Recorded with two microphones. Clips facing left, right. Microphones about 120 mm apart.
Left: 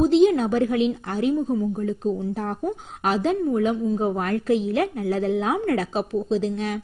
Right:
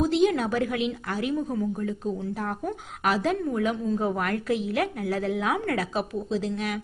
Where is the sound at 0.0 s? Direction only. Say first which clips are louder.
Left 5 dB; 25° left (ahead or behind).